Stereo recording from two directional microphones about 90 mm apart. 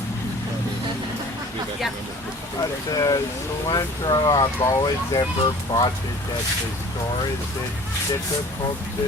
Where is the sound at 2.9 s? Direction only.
45° left (ahead or behind).